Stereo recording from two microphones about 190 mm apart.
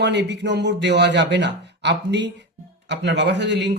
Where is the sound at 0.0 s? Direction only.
65° right (ahead or behind).